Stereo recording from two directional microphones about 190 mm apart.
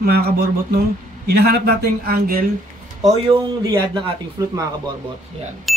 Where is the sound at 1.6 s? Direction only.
50° right (ahead or behind).